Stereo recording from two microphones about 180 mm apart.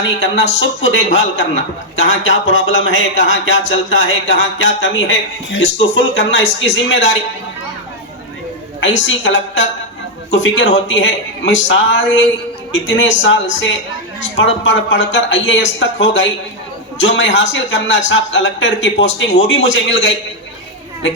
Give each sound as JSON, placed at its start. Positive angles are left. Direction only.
{"t": 0.2, "sound": "a man's voice", "side_deg": 90}
{"t": 8.8, "sound": "a man's voice", "side_deg": 90}